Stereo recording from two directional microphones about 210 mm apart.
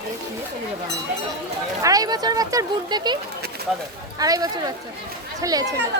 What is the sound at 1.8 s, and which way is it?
Speech, 15° right (ahead or behind).